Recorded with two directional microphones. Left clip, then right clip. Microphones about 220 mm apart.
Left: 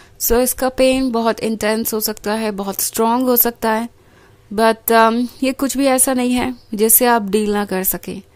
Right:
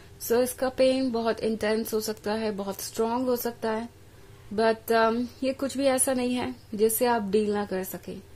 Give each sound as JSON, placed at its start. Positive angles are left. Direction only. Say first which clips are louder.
{"t": 0.3, "sound": "speech", "louder": "left 9 dB", "side_deg": 30}